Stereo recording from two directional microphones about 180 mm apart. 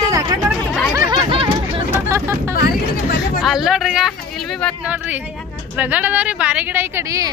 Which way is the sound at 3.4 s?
Centre (ahead or behind).